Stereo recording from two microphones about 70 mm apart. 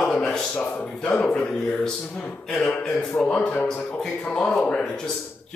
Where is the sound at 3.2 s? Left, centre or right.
Centre.